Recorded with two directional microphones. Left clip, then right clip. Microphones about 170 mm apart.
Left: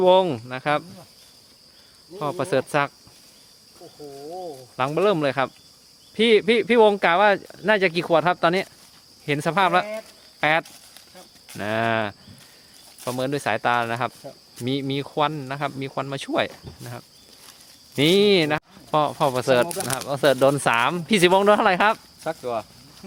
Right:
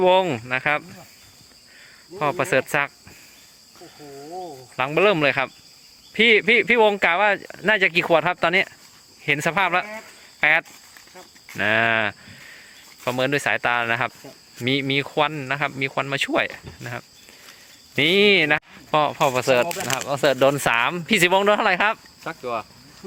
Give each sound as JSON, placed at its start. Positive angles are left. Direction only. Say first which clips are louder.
{"t": 0.0, "sound": "speech", "louder": "even", "side_deg": 0}
{"t": 2.1, "sound": "speech", "louder": "right 3 dB", "side_deg": -5}
{"t": 4.8, "sound": "speech", "louder": "right 2 dB", "side_deg": 0}
{"t": 18.9, "sound": "speech", "louder": "right 2 dB", "side_deg": 15}
{"t": 19.6, "sound": "speech", "louder": "right 2 dB", "side_deg": 45}
{"t": 20.0, "sound": "speech", "louder": "even", "side_deg": 15}
{"t": 22.2, "sound": "speech", "louder": "left 1 dB", "side_deg": 90}